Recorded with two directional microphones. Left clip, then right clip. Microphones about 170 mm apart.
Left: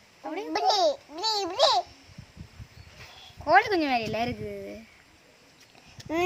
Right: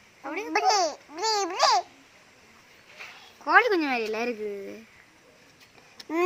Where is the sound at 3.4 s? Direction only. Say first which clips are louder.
Right 1 dB; 15° left (ahead or behind).